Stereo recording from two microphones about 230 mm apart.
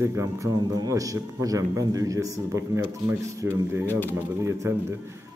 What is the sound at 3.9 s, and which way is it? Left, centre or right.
Speech, centre.